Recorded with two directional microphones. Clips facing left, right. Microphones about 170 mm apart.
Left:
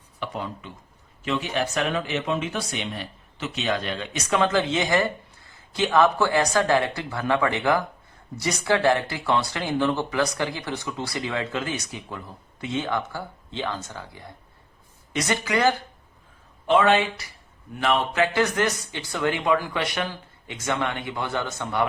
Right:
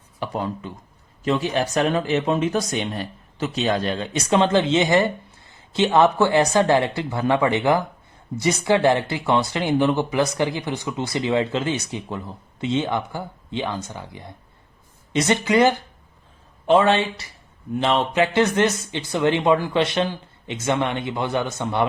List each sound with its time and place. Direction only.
0.2 s speech: 40° right (ahead or behind); by 21.8 s 20° right (ahead or behind)